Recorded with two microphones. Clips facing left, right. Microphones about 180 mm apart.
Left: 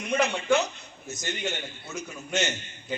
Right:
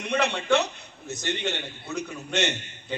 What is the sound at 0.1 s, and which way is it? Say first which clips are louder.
A man's voice: even; 65° right (ahead or behind).